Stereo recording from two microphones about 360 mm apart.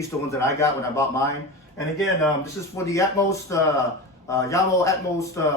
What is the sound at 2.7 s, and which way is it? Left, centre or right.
Speech, centre.